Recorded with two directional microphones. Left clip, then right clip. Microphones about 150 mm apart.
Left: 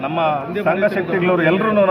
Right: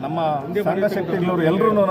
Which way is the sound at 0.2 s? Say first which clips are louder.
Left 2 dB; 25° right (ahead or behind).